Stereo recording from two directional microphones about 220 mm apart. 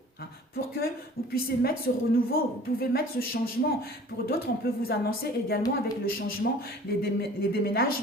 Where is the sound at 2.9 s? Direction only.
40° left (ahead or behind).